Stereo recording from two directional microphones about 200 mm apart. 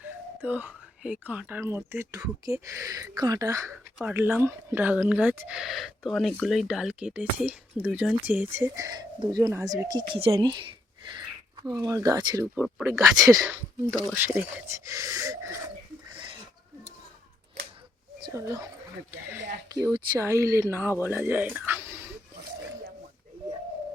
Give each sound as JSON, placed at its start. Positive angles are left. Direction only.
{"t": 0.0, "sound": "speech", "side_deg": -10}
{"t": 3.7, "sound": "speech", "side_deg": 0}
{"t": 18.3, "sound": "speech", "side_deg": -15}
{"t": 19.7, "sound": "speech", "side_deg": -15}